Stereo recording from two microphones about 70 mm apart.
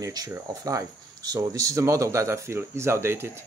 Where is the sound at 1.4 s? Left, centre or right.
Right.